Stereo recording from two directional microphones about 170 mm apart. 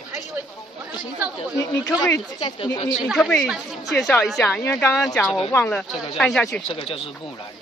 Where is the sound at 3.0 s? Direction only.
Centre (ahead or behind).